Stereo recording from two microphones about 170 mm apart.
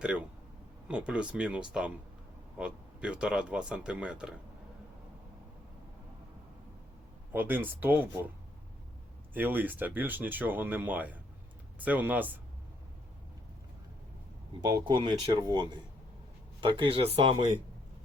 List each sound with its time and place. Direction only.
0.0 s a sound: 5° right (ahead or behind)
0.9 s speech: 5° right (ahead or behind)
7.3 s speech: 10° right (ahead or behind)
9.3 s speech: 10° right (ahead or behind)
14.6 s speech: 25° right (ahead or behind)